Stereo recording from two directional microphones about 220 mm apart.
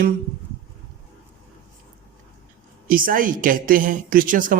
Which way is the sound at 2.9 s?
40° right (ahead or behind).